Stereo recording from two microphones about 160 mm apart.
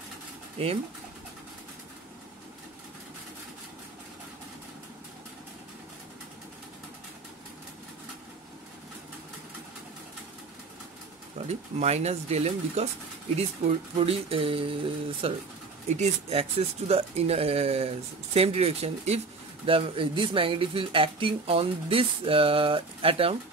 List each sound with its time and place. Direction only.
11.4 s speech: 45° right (ahead or behind)
13.9 s speech: 35° right (ahead or behind)